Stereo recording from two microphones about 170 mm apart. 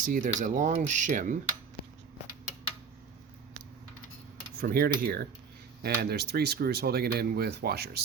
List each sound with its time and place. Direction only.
0.0 s speech: 50° right (ahead or behind)
4.6 s speech: 65° right (ahead or behind)